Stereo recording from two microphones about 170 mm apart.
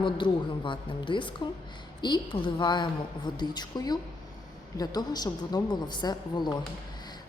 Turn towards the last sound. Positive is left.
turn(degrees=25)  # may be behind; listen again after turning